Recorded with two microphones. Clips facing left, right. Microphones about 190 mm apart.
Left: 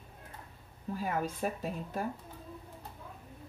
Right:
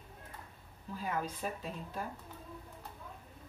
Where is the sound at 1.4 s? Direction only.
55° left (ahead or behind).